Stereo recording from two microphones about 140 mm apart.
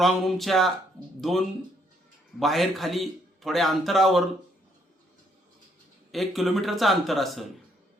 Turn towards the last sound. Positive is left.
turn(degrees=0)  # may be behind; listen again after turning